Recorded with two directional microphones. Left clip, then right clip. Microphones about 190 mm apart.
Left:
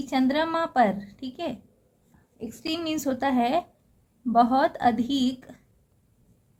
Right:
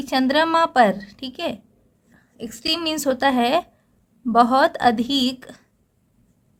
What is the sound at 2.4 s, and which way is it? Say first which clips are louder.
A woman's voice: right 7 dB; 45° right (ahead or behind).